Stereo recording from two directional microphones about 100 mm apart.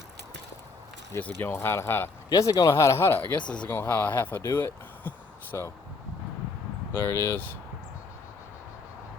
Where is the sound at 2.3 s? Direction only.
35° left (ahead or behind); by 5.1 s 20° left (ahead or behind).